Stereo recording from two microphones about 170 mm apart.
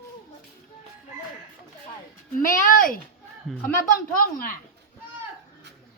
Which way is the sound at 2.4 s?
55° left (ahead or behind).